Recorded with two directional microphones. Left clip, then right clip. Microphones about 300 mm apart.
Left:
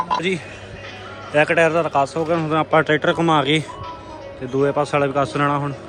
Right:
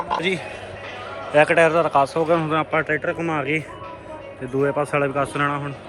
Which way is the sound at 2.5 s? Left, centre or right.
Centre.